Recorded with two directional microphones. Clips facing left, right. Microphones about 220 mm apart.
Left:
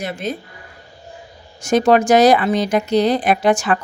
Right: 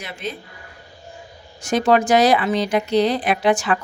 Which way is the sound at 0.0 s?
45° left (ahead or behind).